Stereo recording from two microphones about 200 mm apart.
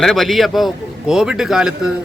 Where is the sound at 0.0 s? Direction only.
Centre (ahead or behind).